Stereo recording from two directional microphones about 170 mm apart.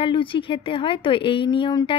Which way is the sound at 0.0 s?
30° left (ahead or behind).